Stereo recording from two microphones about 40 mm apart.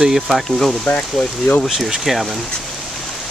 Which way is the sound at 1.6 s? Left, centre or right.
Centre.